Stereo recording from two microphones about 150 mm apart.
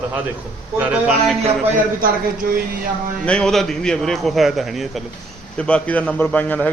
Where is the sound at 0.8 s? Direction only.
10° right (ahead or behind).